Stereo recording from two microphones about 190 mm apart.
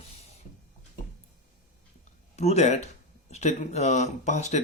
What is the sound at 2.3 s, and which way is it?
Speech, 35° left (ahead or behind).